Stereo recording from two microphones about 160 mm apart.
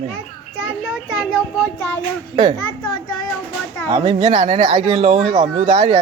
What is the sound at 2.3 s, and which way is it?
Speech, 30° right (ahead or behind).